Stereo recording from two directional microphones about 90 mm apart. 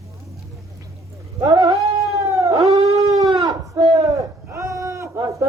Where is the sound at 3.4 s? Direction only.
45° right (ahead or behind).